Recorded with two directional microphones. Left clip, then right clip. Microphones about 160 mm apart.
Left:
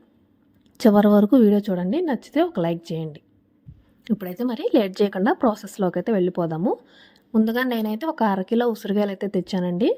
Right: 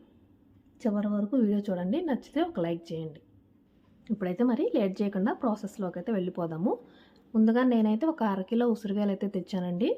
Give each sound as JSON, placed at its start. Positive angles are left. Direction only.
{"t": 0.8, "sound": "a woman's voice", "side_deg": 80}
{"t": 4.2, "sound": "a woman's voice", "side_deg": 0}
{"t": 4.4, "sound": "a woman's voice", "side_deg": 50}
{"t": 7.4, "sound": "a woman's voice", "side_deg": 60}